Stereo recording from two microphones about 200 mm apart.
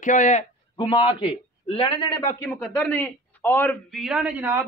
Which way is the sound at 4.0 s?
5° right (ahead or behind).